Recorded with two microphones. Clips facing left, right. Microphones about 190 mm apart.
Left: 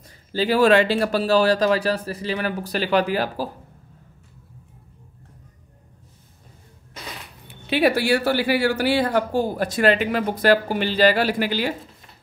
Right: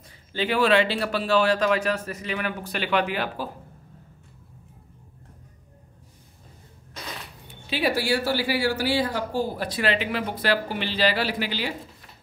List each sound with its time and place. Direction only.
0.3 s speech: 35° left (ahead or behind)
7.6 s speech: 60° left (ahead or behind)